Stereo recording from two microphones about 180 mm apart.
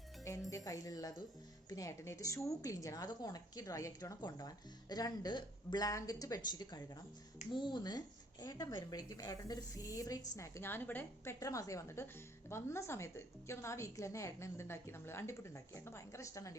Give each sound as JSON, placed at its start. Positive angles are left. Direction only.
{"t": 0.5, "sound": "a woman's voice", "side_deg": 20}